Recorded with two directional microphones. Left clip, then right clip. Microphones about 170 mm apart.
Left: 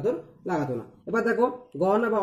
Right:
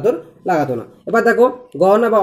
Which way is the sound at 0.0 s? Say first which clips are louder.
Right 11 dB; 15° left (ahead or behind).